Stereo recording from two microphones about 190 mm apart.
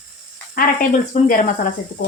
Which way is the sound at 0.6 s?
50° left (ahead or behind).